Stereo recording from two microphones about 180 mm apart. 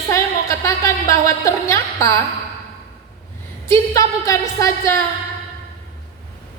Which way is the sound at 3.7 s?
20° left (ahead or behind).